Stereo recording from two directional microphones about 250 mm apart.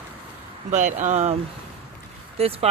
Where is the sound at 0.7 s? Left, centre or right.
Right.